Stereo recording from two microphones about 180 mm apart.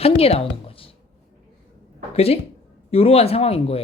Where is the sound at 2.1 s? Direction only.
35° left (ahead or behind).